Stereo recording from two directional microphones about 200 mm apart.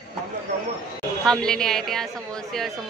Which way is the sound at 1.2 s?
5° left (ahead or behind).